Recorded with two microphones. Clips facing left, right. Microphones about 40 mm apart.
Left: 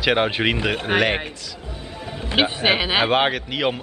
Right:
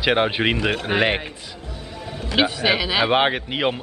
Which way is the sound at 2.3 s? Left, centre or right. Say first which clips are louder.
Even; left.